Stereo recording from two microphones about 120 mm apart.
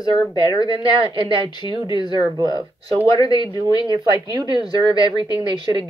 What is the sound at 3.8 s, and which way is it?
Speech, 35° right (ahead or behind).